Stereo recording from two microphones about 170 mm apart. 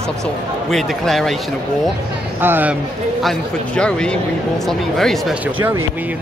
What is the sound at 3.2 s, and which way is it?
Speech, 5° left (ahead or behind).